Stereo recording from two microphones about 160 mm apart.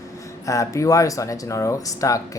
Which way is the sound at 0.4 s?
20° left (ahead or behind).